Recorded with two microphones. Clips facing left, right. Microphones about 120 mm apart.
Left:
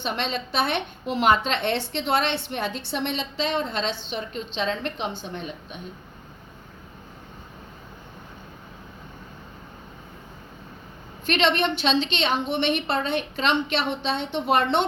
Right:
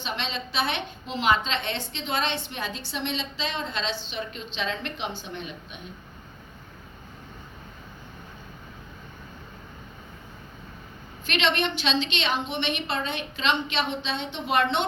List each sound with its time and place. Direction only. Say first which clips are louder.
0.0 s a woman's voice: left 4 dB; 55° left (ahead or behind); by 5.5 s 40° left (ahead or behind)
11.3 s a woman's voice: left 4 dB; 50° left (ahead or behind)